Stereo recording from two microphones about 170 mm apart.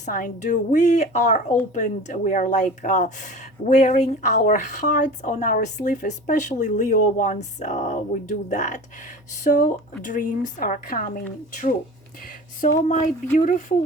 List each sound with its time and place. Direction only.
0.0 s speech: 50° left (ahead or behind)